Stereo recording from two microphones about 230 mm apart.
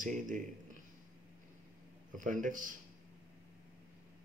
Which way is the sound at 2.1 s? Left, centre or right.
Right.